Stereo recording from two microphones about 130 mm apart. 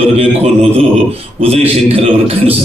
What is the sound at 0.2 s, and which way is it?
A man's voice, 50° right (ahead or behind).